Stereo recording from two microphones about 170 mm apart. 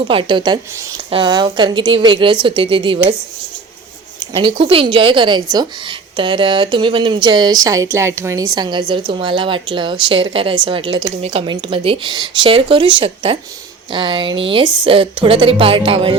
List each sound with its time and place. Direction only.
0.1 s speech: 30° right (ahead or behind)
4.2 s a woman's voice: 30° right (ahead or behind)